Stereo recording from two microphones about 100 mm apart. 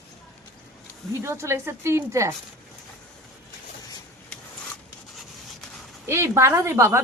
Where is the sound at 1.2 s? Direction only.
25° right (ahead or behind).